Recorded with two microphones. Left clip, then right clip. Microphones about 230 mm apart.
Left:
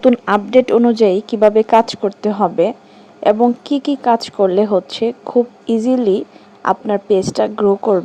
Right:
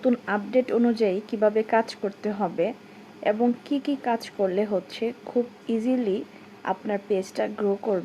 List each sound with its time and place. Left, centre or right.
0.0 s speech: left